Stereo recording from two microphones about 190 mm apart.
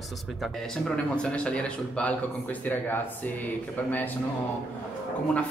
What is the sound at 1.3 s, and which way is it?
Speech, 5° left (ahead or behind).